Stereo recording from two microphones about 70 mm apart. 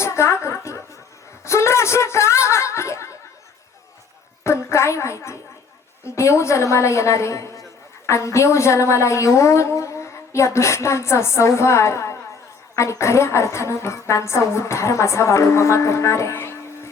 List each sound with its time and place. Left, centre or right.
0.0 s music: left
1.5 s chuckle: left
4.4 s a sound: left
6.1 s a man's voice: left